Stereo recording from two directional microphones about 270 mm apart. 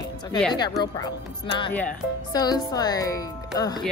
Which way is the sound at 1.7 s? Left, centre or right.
Centre.